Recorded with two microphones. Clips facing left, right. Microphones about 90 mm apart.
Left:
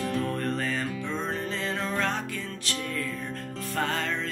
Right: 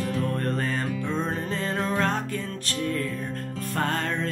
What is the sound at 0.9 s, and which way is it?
Music, 10° right (ahead or behind).